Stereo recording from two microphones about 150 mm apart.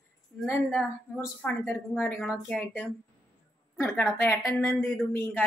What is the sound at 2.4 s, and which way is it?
Speech, 10° left (ahead or behind).